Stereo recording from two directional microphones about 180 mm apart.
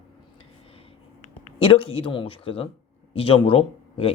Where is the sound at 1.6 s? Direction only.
30° left (ahead or behind).